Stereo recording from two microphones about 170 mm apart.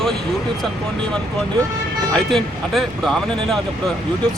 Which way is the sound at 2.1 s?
Centre (ahead or behind).